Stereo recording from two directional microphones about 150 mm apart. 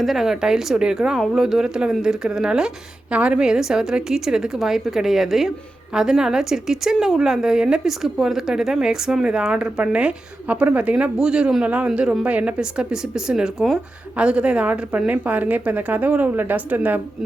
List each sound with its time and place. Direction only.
0.0 s a woman's voice: centre (ahead or behind)